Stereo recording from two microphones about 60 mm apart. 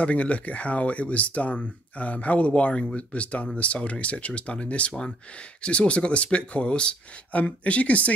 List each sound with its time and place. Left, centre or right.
0.0 s speech: left